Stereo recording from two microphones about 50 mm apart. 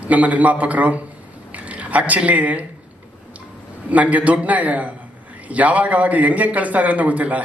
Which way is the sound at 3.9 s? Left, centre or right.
Right.